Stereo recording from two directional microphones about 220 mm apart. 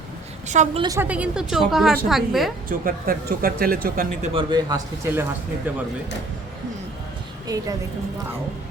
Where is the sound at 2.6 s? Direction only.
40° right (ahead or behind).